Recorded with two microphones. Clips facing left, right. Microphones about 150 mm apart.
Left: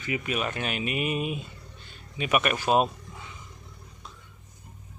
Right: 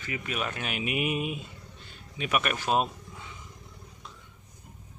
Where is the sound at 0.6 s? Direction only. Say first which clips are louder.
Left 1 dB; 10° right (ahead or behind).